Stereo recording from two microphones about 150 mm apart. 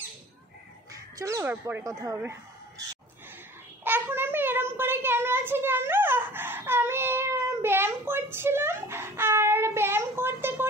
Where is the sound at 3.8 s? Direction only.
15° right (ahead or behind).